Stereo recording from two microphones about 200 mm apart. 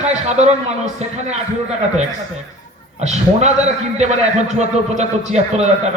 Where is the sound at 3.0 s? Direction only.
35° right (ahead or behind).